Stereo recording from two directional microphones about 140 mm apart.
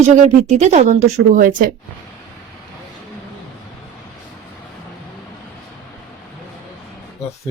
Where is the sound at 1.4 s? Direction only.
75° right (ahead or behind).